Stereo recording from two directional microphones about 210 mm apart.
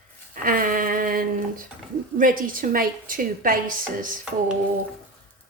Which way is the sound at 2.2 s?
40° right (ahead or behind).